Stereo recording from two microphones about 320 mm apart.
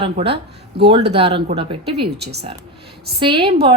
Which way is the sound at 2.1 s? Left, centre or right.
Right.